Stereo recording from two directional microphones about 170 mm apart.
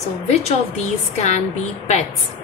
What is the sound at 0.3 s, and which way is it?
A woman's voice, 40° left (ahead or behind).